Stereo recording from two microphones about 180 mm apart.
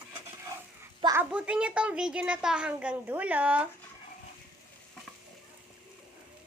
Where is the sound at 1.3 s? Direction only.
5° right (ahead or behind).